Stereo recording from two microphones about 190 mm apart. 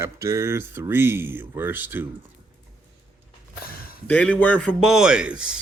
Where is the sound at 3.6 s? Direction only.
50° left (ahead or behind).